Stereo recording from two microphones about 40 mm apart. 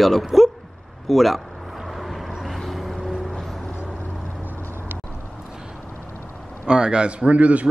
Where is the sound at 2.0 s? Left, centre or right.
Centre.